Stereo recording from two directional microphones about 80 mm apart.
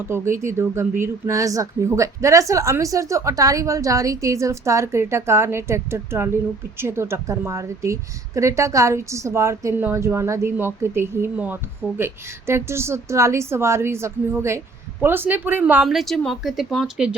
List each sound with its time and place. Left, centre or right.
0.0 s a woman's voice: right
11.3 s speech: right
11.9 s a woman's voice: right
15.8 s speech: centre